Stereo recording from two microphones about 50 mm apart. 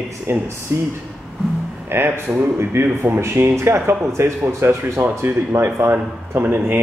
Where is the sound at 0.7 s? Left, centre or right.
Right.